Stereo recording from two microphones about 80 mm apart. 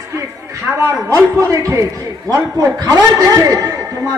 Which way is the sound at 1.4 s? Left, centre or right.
Right.